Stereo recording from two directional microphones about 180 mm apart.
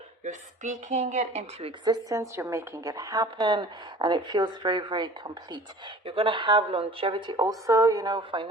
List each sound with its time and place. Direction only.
0.3 s speech: 40° right (ahead or behind)
1.8 s a woman's voice: 20° right (ahead or behind)